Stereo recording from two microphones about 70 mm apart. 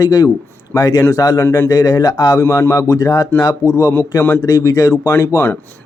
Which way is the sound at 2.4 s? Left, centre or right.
Left.